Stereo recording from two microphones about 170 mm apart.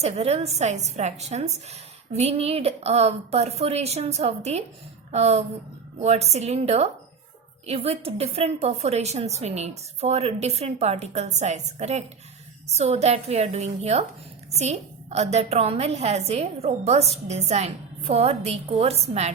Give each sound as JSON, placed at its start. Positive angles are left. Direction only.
{"t": 0.0, "sound": "a woman's voice", "side_deg": -40}